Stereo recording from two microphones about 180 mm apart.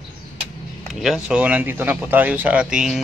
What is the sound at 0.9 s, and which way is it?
Speech, centre (ahead or behind).